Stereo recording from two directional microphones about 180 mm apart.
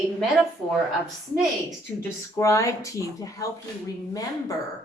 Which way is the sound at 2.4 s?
15° left (ahead or behind).